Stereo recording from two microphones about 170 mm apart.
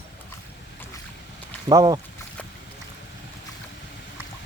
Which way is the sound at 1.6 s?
20° right (ahead or behind).